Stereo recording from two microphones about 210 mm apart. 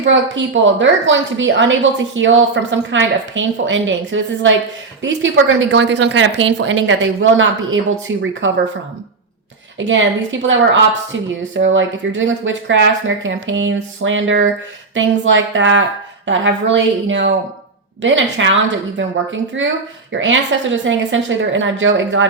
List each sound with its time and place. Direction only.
0.0 s a woman's voice: 60° right (ahead or behind)
9.7 s a woman's voice: 60° right (ahead or behind)
11.1 s a woman's voice: 65° right (ahead or behind)